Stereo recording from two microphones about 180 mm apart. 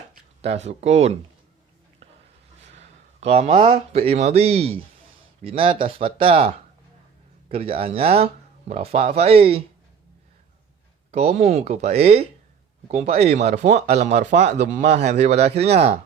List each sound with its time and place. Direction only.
0.4 s speech: 35° right (ahead or behind)
3.2 s speech: 35° right (ahead or behind)
11.1 s speech: 35° right (ahead or behind)